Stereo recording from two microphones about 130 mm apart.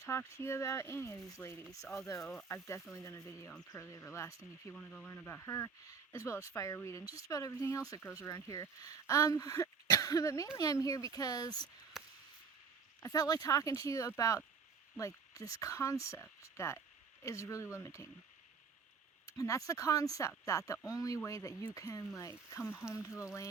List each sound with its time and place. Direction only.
0.0 s speech: 20° left (ahead or behind)
4.7 s speech: 10° left (ahead or behind); by 11.7 s 30° left (ahead or behind)
11.9 s a sound: centre (ahead or behind)
13.0 s speech: 30° left (ahead or behind)
19.2 s speech: 25° left (ahead or behind)